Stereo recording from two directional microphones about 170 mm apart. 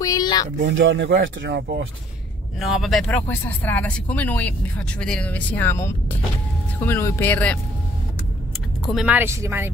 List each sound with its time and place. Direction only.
0.0 s a sound: 20° left (ahead or behind)
0.7 s speech: 90° right
2.6 s speech: centre (ahead or behind)
8.9 s speech: 5° right (ahead or behind)